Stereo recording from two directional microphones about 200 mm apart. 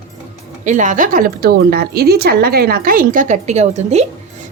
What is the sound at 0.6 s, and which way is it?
A woman's voice, 40° right (ahead or behind).